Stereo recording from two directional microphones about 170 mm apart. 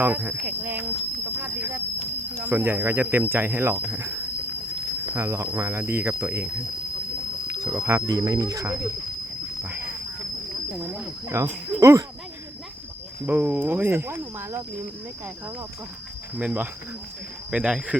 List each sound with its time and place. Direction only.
0.0 s speech: 10° right (ahead or behind)
7.7 s speech: 10° right (ahead or behind)
10.9 s speech: 15° right (ahead or behind)
13.2 s speech: 10° right (ahead or behind)
16.4 s speech: 10° right (ahead or behind)